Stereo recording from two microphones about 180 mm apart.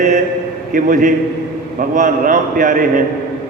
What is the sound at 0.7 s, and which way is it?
A man's voice, 50° right (ahead or behind).